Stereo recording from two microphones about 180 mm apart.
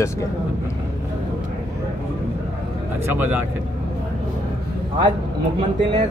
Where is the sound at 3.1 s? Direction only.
10° right (ahead or behind).